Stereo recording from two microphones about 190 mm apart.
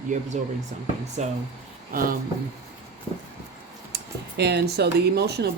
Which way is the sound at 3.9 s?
60° right (ahead or behind).